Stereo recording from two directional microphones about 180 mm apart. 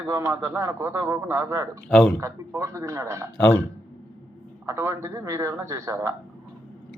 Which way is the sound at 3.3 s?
5° left (ahead or behind).